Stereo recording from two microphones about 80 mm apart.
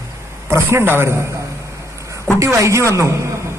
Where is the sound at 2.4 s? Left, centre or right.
Right.